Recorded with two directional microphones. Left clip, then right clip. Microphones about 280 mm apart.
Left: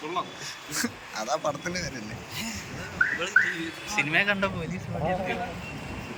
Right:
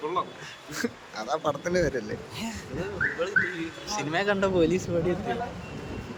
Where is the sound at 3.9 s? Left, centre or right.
Right.